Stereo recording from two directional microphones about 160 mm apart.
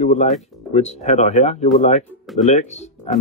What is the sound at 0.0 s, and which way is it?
Speech, 45° left (ahead or behind).